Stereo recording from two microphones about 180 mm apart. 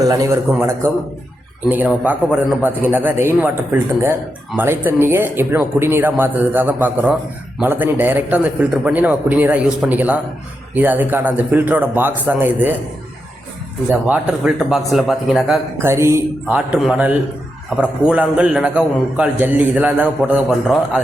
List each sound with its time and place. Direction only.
0.0 s a man's voice: 20° right (ahead or behind)
13.9 s a man's voice: 5° right (ahead or behind)
15.8 s a man's voice: 15° right (ahead or behind)